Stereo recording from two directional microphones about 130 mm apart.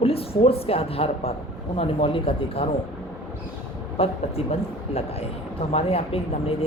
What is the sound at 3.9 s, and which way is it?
Speech, 50° left (ahead or behind).